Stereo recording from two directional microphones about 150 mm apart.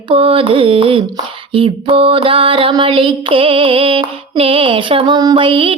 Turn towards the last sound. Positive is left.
turn(degrees=-35)  # may be behind; listen again after turning